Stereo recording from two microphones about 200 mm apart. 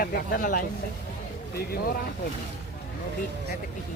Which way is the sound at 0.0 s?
45° left (ahead or behind).